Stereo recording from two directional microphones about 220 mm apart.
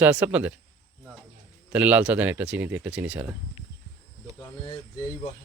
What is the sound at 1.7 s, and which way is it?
Speech, 5° right (ahead or behind).